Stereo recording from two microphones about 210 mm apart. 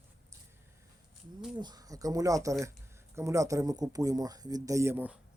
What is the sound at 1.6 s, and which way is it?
Speech, 20° right (ahead or behind).